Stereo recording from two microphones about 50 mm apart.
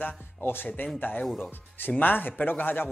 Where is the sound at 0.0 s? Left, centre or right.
Left.